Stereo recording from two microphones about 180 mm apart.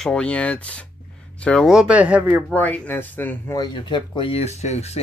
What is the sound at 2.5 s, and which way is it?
Speech, 10° left (ahead or behind).